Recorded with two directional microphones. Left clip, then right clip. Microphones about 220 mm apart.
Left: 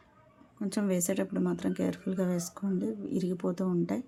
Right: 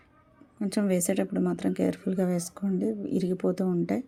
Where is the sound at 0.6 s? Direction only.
10° right (ahead or behind).